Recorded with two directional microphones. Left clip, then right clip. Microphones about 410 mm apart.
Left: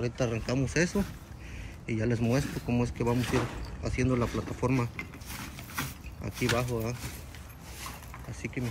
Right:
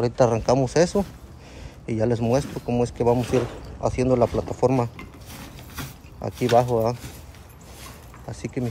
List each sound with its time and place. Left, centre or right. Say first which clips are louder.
0.0 s speech: right 12 dB; right
0.3 s speech: right 11 dB; centre
5.8 s a sound: right 3 dB; centre